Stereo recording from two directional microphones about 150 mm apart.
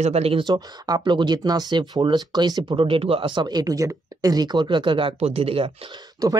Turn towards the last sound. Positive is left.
turn(degrees=-25)  # may be behind; listen again after turning